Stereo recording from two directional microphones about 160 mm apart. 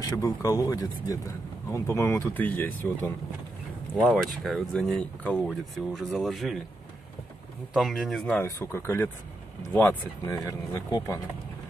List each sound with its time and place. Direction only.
0.0 s speech: 20° left (ahead or behind)
4.0 s speech: centre (ahead or behind)
7.7 s speech: centre (ahead or behind)
8.4 s speech: 15° left (ahead or behind)